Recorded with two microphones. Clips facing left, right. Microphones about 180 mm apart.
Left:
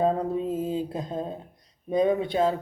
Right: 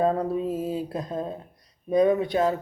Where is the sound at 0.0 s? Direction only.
20° left (ahead or behind).